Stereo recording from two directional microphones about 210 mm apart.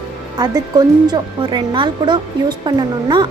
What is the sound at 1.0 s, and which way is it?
Speech, 20° right (ahead or behind).